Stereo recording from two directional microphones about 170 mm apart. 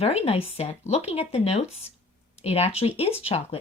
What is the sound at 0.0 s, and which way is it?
Speech, 35° left (ahead or behind).